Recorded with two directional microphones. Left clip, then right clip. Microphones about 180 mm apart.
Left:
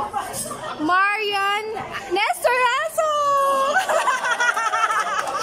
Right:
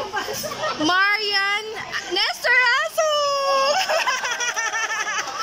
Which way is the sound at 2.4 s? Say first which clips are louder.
Right 2 dB; 20° left (ahead or behind).